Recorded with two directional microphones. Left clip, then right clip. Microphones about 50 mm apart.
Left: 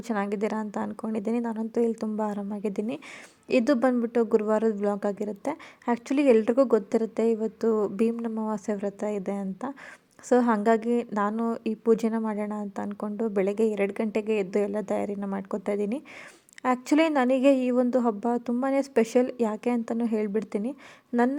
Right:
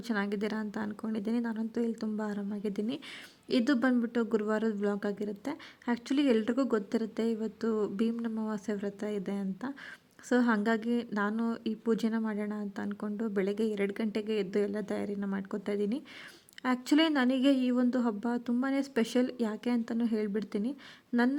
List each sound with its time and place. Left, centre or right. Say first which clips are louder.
0.1 s speech: left 5 dB; left
3.5 s speech: left 6 dB; left
15.2 s speech: left 5 dB; left
15.4 s speech: left 5 dB; left